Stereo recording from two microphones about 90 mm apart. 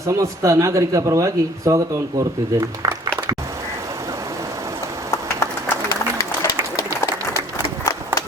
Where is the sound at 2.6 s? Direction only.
45° right (ahead or behind).